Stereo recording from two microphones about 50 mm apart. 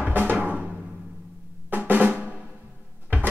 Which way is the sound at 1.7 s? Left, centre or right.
Right.